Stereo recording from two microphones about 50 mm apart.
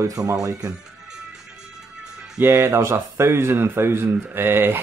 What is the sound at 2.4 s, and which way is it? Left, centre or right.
Speech, right.